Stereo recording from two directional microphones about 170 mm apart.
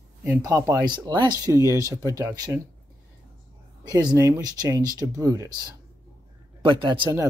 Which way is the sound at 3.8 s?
20° right (ahead or behind).